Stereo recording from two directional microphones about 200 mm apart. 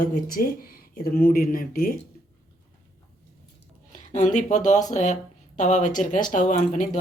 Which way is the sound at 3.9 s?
40° left (ahead or behind).